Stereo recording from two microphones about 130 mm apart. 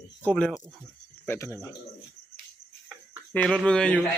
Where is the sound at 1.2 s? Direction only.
20° left (ahead or behind).